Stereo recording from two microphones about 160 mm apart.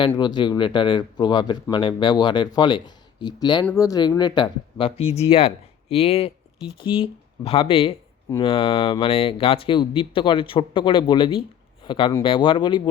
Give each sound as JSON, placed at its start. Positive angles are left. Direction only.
{"t": 0.2, "sound": "speech", "side_deg": 30}